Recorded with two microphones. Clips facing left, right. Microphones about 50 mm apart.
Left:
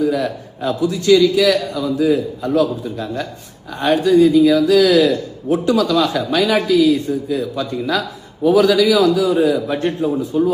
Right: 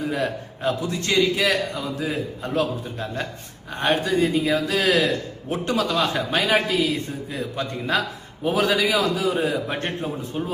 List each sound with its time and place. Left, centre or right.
0.0 s speech: right